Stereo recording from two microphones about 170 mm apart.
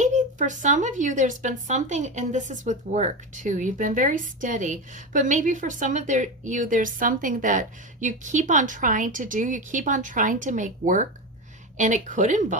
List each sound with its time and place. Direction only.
0.0 s speech: 45° right (ahead or behind)